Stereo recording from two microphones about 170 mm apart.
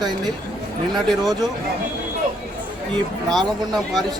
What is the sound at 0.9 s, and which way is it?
Speech, centre (ahead or behind).